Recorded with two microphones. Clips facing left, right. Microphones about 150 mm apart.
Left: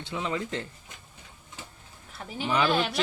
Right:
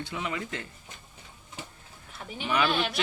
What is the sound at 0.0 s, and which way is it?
Speech, 25° left (ahead or behind).